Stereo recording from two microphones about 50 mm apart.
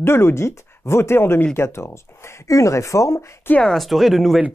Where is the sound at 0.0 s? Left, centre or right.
Left.